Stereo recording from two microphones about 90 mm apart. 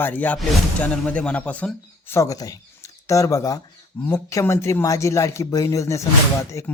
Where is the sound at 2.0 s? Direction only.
30° left (ahead or behind).